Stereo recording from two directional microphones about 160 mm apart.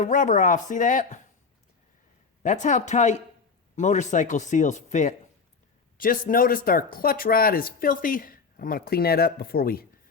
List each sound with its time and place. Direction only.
0.0 s speech: 50° left (ahead or behind)
2.4 s speech: 50° left (ahead or behind)
6.0 s speech: 60° left (ahead or behind)